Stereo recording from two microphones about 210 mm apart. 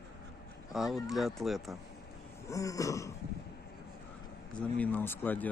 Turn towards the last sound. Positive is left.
turn(degrees=10)  # may be behind; listen again after turning